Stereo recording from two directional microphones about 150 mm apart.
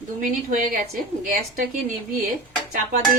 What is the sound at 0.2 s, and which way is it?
A woman's voice, 65° right (ahead or behind).